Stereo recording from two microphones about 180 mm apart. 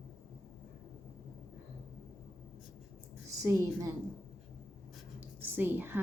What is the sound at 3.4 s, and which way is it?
Speech, 20° right (ahead or behind).